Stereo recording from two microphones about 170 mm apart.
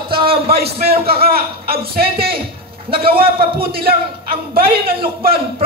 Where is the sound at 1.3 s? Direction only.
35° right (ahead or behind).